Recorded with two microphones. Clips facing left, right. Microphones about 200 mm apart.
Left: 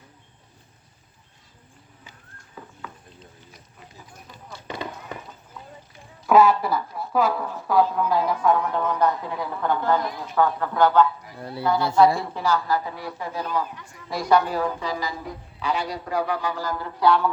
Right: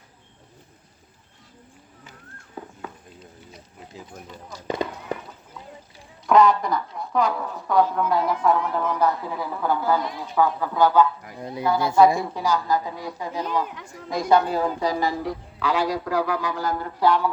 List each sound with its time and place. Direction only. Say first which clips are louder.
6.2 s speech: even; 5° left (ahead or behind)
10.3 s a woman's voice: even; 10° right (ahead or behind); by 14.9 s 30° right (ahead or behind)
15.2 s a man's voice: right 5 dB; 90° right
16.6 s speech: right 3 dB; 50° right (ahead or behind)